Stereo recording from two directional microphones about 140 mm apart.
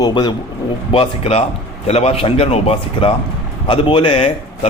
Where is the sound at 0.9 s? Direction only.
45° left (ahead or behind).